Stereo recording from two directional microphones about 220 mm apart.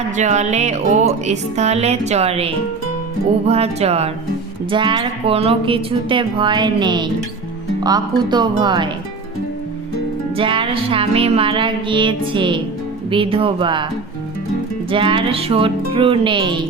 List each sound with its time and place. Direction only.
0.2 s music: 30° right (ahead or behind)
3.4 s speech: 30° right (ahead or behind)
10.3 s speech: 25° right (ahead or behind)
14.8 s speech: 25° right (ahead or behind)